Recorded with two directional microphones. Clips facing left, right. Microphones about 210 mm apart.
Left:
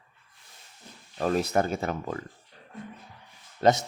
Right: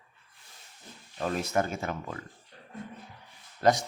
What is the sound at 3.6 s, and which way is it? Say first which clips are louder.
Speech: left 2 dB; 25° left (ahead or behind).